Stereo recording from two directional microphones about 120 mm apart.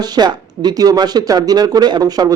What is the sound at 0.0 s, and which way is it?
Speech, 35° right (ahead or behind).